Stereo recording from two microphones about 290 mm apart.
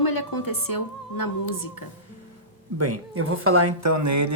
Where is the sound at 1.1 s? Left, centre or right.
Left.